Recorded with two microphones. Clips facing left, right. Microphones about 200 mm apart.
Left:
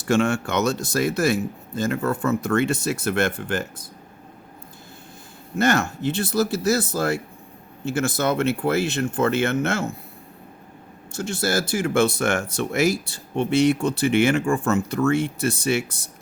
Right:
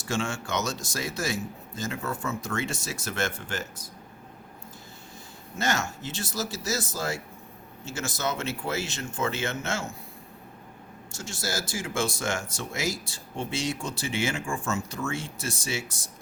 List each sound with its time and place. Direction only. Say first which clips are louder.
0.0 s speech: left 10 dB; 60° left (ahead or behind)
5.5 s speech: left 9 dB; 60° left (ahead or behind)
11.1 s speech: left 10 dB; 60° left (ahead or behind)